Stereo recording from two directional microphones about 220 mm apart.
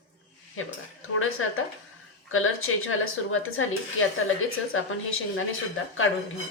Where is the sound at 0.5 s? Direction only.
70° left (ahead or behind).